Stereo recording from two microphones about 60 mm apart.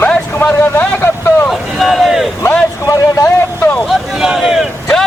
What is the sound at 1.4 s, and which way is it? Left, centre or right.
Boat, centre.